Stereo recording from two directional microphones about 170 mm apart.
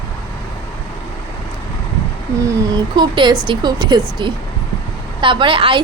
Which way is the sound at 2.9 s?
25° right (ahead or behind).